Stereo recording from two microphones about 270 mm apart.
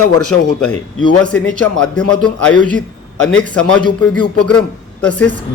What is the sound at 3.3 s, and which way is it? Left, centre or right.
A man's voice, centre.